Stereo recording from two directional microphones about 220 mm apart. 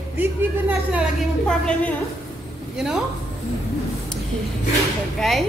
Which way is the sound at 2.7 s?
Centre (ahead or behind).